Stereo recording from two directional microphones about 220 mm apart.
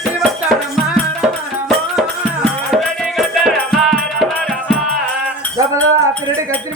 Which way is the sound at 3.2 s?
Centre (ahead or behind).